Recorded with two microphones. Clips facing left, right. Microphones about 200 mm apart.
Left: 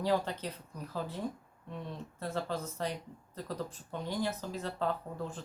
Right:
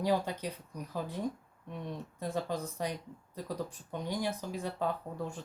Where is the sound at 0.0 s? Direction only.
10° right (ahead or behind).